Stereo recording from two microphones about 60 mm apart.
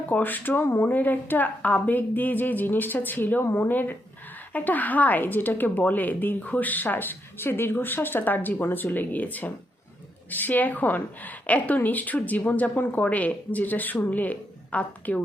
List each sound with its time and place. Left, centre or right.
0.1 s a woman's voice: left